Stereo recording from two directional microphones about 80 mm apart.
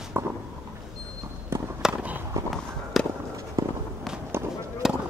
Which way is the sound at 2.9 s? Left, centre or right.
Centre.